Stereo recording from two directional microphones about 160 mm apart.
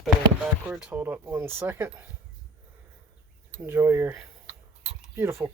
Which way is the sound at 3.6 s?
15° right (ahead or behind).